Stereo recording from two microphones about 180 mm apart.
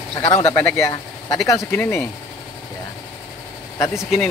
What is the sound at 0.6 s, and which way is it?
Speech, 5° left (ahead or behind).